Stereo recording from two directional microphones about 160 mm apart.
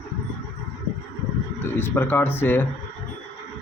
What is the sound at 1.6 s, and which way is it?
Speech, 15° left (ahead or behind).